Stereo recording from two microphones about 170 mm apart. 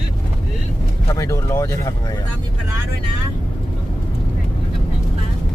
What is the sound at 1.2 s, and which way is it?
Speech, 20° left (ahead or behind).